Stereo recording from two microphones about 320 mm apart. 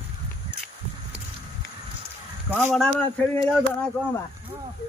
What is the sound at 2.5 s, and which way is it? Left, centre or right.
Speech, centre.